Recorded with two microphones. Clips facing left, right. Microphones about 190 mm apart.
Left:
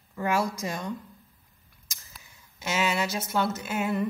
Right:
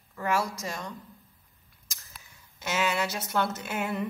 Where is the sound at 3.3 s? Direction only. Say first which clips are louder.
Left 1 dB; 5° left (ahead or behind).